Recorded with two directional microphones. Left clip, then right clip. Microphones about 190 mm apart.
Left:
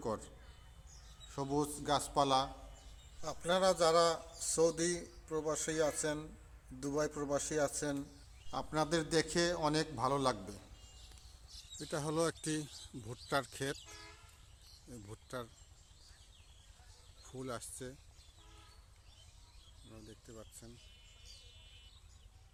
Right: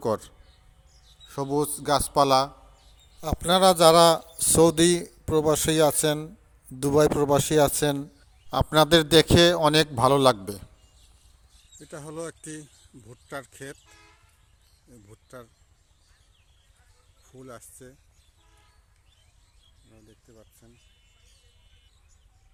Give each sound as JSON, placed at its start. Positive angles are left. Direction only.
{"t": 0.0, "sound": "a man's voice", "side_deg": -35}
{"t": 11.8, "sound": "speech", "side_deg": 0}
{"t": 13.8, "sound": "a sound", "side_deg": -60}
{"t": 15.0, "sound": "speech", "side_deg": 0}
{"t": 17.2, "sound": "speech", "side_deg": 0}
{"t": 20.2, "sound": "a sound", "side_deg": -5}